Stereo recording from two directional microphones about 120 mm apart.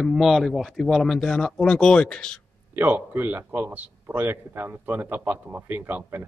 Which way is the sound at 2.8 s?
15° right (ahead or behind).